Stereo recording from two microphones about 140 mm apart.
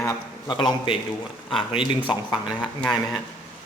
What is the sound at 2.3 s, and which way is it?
Speech, 5° right (ahead or behind).